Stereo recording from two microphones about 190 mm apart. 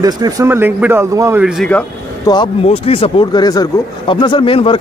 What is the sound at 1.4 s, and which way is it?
Speech, 5° left (ahead or behind).